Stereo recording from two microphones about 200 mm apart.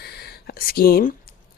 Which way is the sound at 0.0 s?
50° left (ahead or behind).